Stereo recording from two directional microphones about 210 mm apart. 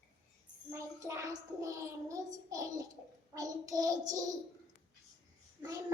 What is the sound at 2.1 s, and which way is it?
Child singing, 15° right (ahead or behind).